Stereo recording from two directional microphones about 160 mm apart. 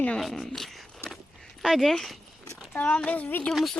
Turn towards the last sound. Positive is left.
turn(degrees=0)  # may be behind; listen again after turning